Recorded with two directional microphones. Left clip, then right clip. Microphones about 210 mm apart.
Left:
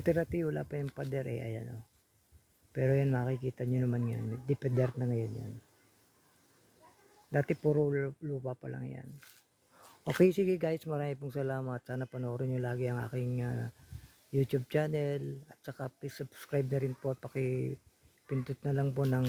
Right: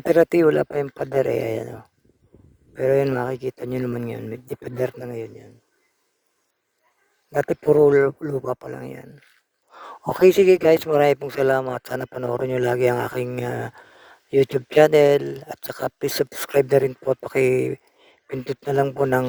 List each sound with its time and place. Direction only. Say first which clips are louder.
0.1 s speech: right 17 dB; 50° right (ahead or behind)
2.8 s speech: right 13 dB; 50° right (ahead or behind)
7.3 s speech: right 13 dB; 50° right (ahead or behind)
10.2 s speech: right 19 dB; 45° right (ahead or behind)